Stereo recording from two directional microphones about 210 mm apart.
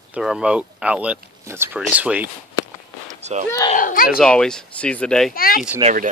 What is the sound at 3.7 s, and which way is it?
Speech, 40° left (ahead or behind).